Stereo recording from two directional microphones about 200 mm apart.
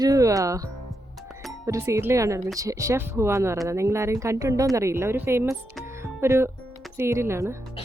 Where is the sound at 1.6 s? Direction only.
15° right (ahead or behind).